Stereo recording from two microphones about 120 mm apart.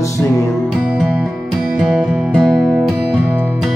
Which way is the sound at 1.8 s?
Centre (ahead or behind).